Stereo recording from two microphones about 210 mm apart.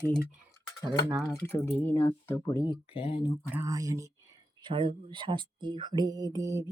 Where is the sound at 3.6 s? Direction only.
15° right (ahead or behind).